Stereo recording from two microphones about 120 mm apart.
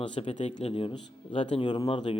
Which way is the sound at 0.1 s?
50° left (ahead or behind).